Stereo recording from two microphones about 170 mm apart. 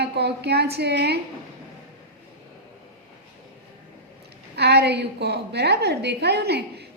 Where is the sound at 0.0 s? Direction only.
75° right (ahead or behind).